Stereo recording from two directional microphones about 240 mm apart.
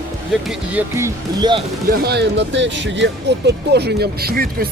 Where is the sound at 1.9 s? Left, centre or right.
Right.